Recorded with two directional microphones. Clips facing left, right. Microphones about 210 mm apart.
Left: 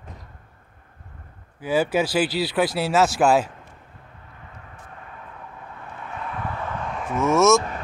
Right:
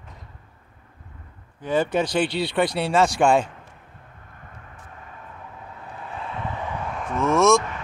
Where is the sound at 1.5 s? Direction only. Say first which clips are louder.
Left 1 dB; 5° left (ahead or behind).